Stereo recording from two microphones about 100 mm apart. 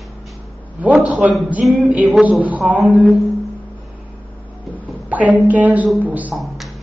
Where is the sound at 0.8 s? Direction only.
15° right (ahead or behind).